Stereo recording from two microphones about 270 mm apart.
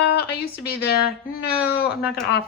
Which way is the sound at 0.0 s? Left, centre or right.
Left.